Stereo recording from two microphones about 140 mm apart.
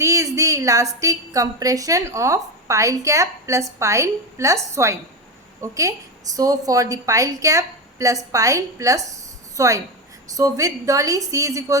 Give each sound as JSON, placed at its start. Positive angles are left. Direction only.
{"t": 0.0, "sound": "a woman's voice", "side_deg": -20}